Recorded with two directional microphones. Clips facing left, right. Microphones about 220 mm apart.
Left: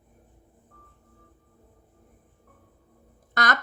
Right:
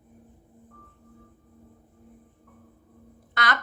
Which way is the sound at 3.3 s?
45° left (ahead or behind).